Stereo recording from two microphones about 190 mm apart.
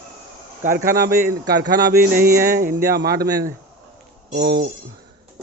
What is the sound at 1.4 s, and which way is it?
Speech, 60° right (ahead or behind).